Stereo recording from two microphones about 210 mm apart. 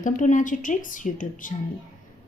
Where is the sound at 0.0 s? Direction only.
40° left (ahead or behind).